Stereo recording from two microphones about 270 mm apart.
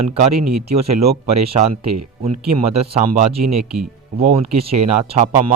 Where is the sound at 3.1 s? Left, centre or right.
Right.